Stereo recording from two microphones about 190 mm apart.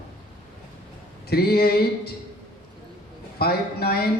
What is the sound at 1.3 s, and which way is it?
Speech, 55° left (ahead or behind).